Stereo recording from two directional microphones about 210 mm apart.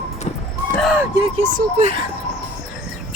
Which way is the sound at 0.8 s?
Centre (ahead or behind).